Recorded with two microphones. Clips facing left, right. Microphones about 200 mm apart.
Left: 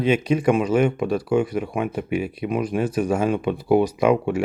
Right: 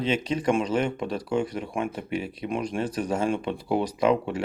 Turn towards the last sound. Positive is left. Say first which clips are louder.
# left 4 dB
turn(degrees=10)  # may be behind; listen again after turning